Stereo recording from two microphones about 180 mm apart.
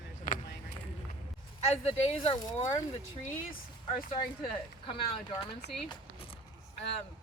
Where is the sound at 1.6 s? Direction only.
35° left (ahead or behind).